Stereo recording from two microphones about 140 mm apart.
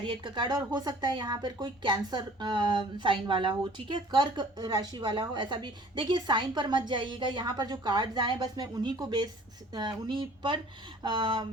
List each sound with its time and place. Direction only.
0.0 s speech: 35° right (ahead or behind)